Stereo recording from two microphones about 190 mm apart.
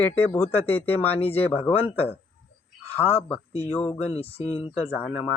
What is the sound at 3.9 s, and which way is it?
Speech, 30° left (ahead or behind).